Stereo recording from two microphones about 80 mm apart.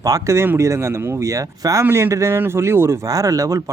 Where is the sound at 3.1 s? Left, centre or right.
Right.